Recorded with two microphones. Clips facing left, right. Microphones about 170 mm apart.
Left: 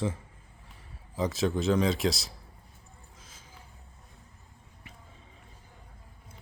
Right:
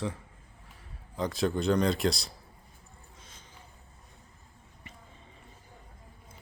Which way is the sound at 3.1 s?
Centre (ahead or behind).